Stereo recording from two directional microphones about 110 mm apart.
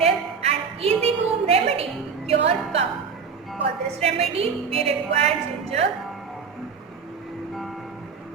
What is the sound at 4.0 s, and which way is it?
Music, 65° right (ahead or behind).